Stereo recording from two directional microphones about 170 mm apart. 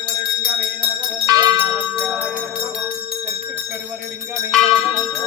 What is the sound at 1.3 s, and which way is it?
Bell, 25° right (ahead or behind).